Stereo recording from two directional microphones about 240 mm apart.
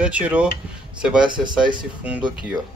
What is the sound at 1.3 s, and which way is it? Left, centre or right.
Speech, centre.